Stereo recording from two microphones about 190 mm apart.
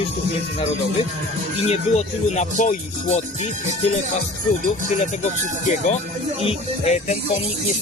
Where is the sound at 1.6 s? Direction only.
35° left (ahead or behind).